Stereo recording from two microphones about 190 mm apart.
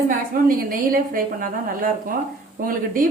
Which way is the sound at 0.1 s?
50° right (ahead or behind).